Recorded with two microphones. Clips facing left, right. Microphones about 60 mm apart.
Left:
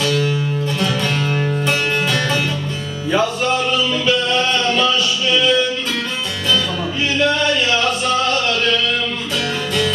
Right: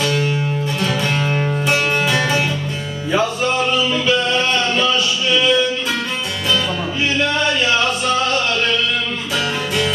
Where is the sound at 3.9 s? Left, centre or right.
Right.